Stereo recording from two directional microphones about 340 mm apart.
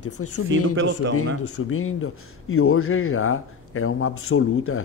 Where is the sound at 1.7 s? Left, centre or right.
Left.